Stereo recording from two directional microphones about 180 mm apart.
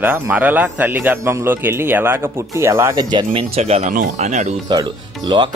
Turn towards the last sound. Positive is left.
turn(degrees=-25)  # may be behind; listen again after turning